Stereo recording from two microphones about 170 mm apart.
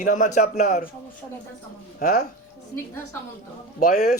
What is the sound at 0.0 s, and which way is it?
Speech, 50° left (ahead or behind).